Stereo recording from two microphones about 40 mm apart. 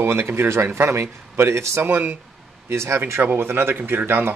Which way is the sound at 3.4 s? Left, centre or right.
Right.